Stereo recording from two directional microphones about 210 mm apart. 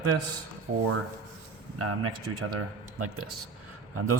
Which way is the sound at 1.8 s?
90° right.